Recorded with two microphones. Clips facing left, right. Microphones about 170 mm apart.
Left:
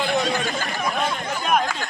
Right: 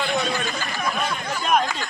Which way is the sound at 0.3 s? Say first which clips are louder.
Left 2 dB; 45° left (ahead or behind).